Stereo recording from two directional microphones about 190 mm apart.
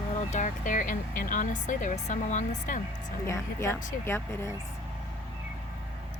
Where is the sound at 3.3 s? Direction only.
15° left (ahead or behind).